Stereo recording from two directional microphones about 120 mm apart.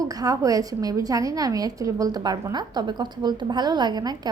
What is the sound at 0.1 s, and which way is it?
A woman's voice, 30° right (ahead or behind).